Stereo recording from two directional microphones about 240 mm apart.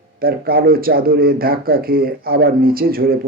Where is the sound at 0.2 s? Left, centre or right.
Right.